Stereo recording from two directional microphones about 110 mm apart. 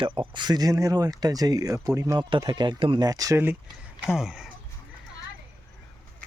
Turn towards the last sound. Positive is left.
turn(degrees=-5)  # may be behind; listen again after turning